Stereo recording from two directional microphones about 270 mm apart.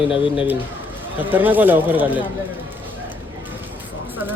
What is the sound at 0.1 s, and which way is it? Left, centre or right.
Speech, centre.